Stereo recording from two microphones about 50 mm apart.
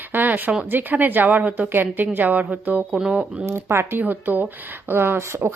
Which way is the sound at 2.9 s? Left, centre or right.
Centre.